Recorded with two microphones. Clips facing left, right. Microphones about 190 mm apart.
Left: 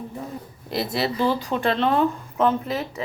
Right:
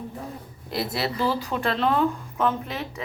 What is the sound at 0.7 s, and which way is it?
A woman's voice, centre (ahead or behind).